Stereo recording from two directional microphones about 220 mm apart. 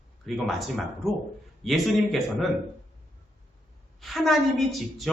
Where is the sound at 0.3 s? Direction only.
Centre (ahead or behind).